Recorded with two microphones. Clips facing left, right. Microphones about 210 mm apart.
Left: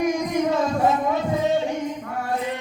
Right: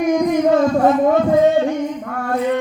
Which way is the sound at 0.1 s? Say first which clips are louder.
Right 7 dB; 55° right (ahead or behind).